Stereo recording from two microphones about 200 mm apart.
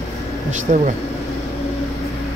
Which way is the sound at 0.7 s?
35° right (ahead or behind).